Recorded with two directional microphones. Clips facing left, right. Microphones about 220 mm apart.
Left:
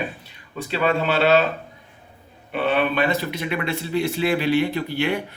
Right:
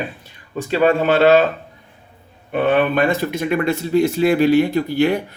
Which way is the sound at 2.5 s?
50° right (ahead or behind).